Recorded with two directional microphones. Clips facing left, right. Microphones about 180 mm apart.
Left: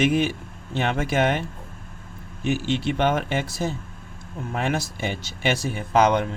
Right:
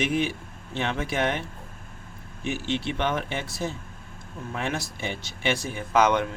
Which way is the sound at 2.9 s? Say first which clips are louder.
Left 6 dB; 50° left (ahead or behind).